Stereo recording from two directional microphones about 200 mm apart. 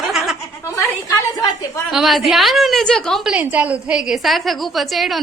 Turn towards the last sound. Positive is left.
turn(degrees=0)  # may be behind; listen again after turning